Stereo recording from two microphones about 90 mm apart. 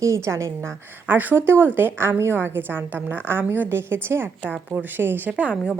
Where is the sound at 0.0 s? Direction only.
35° right (ahead or behind).